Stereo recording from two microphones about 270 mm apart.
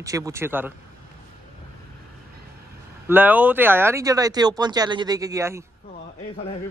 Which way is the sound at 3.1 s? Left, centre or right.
Centre.